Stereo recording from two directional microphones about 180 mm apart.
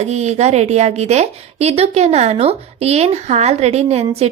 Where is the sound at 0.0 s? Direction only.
40° right (ahead or behind).